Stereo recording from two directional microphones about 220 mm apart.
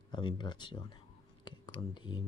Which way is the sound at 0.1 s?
20° left (ahead or behind).